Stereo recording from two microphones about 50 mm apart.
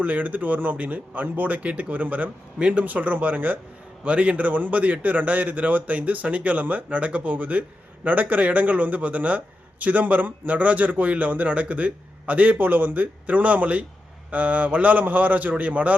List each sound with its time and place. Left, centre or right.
0.0 s a man's voice: right